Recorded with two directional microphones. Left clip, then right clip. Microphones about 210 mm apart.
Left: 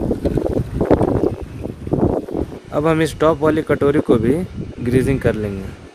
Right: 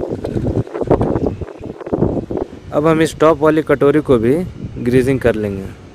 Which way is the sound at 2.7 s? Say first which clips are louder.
Right 3 dB; 25° right (ahead or behind).